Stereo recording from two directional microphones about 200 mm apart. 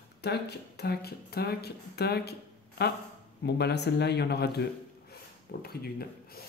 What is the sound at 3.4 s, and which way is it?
Mantra, 55° left (ahead or behind).